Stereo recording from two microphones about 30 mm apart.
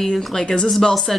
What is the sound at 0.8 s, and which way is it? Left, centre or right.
Speech, centre.